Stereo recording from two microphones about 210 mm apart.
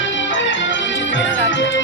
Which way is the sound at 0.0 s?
65° left (ahead or behind).